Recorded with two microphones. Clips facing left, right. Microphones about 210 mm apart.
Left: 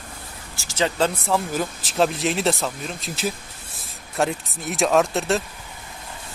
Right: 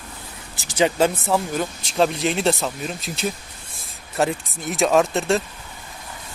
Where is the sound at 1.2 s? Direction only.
Centre (ahead or behind).